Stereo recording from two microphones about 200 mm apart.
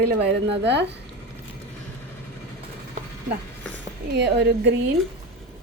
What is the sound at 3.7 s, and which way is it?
Speech, 60° right (ahead or behind).